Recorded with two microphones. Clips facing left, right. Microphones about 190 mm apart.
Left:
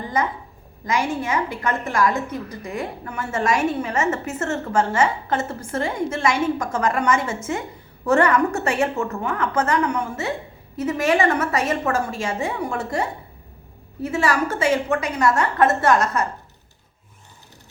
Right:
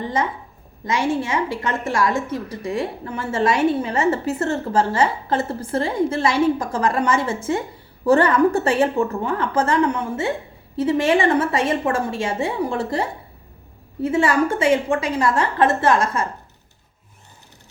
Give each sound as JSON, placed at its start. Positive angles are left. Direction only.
{"t": 0.0, "sound": "a woman's voice", "side_deg": -25}